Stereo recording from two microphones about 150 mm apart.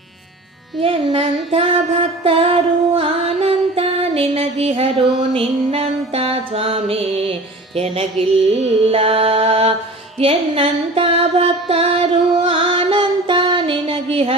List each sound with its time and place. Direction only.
0.8 s music: 40° right (ahead or behind)